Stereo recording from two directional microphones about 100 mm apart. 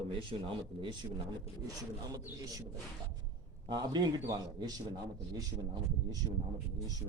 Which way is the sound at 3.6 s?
45° right (ahead or behind).